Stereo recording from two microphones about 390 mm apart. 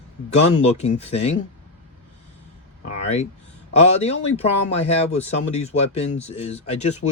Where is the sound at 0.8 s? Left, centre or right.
Centre.